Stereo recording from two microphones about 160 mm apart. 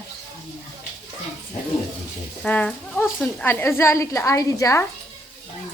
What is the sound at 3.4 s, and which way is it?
A woman's voice, 15° left (ahead or behind).